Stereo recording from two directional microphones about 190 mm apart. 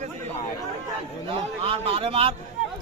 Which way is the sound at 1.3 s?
30° right (ahead or behind).